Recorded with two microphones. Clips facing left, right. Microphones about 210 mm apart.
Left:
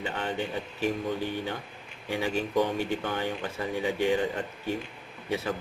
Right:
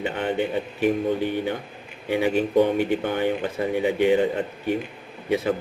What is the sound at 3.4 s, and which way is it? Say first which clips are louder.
A man's voice: right 7 dB; 20° right (ahead or behind).